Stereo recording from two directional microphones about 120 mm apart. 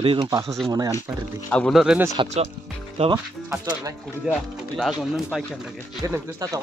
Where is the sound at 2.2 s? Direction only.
45° right (ahead or behind).